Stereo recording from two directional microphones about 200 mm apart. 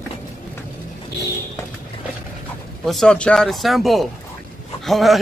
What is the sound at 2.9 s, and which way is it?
Speech, 5° left (ahead or behind).